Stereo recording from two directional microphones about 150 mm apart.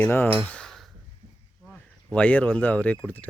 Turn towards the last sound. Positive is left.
turn(degrees=10)  # may be behind; listen again after turning